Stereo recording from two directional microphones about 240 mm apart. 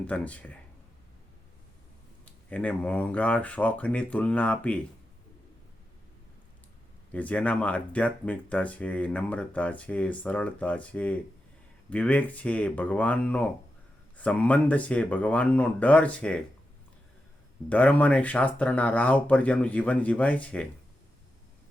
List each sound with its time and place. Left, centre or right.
0.1 s speech: centre
2.5 s speech: centre
7.1 s speech: centre
17.7 s speech: centre